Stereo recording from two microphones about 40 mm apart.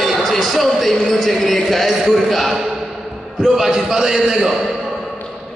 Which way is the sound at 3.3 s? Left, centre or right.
Centre.